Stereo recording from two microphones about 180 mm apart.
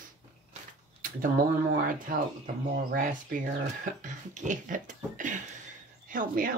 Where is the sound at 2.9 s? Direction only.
45° right (ahead or behind).